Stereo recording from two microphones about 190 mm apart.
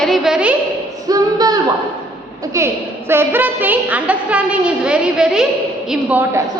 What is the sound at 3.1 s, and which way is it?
A woman's voice, 10° right (ahead or behind).